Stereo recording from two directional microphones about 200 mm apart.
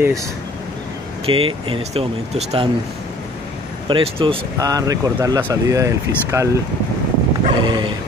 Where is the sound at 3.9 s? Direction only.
25° right (ahead or behind).